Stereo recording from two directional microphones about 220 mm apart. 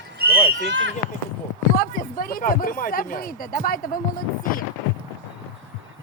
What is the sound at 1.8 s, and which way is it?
Speech, 40° left (ahead or behind).